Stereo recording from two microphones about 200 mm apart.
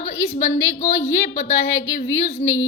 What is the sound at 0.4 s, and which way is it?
Speech, 70° left (ahead or behind).